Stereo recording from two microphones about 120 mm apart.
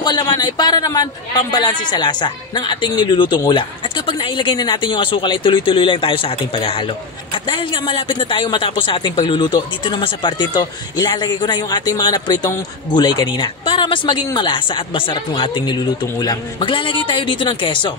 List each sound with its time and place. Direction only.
0.0 s a woman's voice: 35° left (ahead or behind)